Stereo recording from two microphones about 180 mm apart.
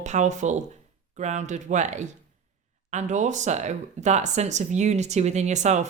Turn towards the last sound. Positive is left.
turn(degrees=-40)  # may be behind; listen again after turning